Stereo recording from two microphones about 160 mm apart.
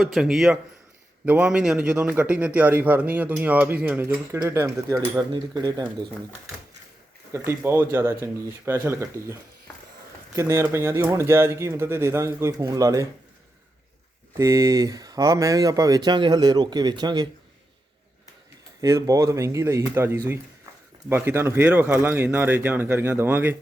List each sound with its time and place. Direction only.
0.0 s a man's voice: centre (ahead or behind); by 5.8 s 25° right (ahead or behind)
7.3 s a man's voice: 15° right (ahead or behind)
14.3 s speech: 20° right (ahead or behind)
18.8 s a man's voice: 20° right (ahead or behind)